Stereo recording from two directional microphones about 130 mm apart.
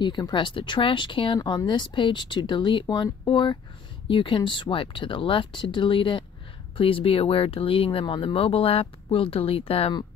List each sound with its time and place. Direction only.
0.0 s speech: 35° left (ahead or behind)